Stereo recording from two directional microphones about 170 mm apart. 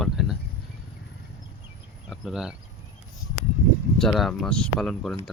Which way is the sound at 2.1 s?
5° right (ahead or behind).